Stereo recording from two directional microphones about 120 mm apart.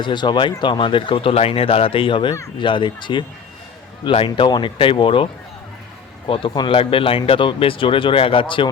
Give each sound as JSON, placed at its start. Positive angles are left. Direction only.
{"t": 0.0, "sound": "speech", "side_deg": 40}